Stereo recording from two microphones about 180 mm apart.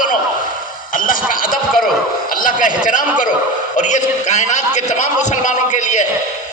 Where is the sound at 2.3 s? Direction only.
50° left (ahead or behind).